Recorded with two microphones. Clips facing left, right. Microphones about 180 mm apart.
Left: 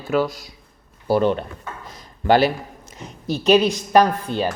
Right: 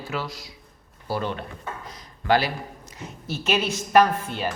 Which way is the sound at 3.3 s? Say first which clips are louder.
Left 10 dB; 35° left (ahead or behind).